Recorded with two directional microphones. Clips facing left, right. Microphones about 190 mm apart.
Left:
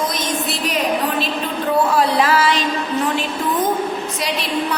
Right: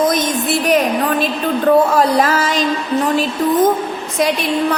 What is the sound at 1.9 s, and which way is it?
A woman's voice, 45° right (ahead or behind).